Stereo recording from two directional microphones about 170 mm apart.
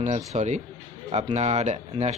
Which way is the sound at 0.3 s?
40° right (ahead or behind).